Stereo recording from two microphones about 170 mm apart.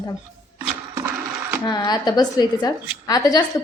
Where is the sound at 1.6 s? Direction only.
25° left (ahead or behind).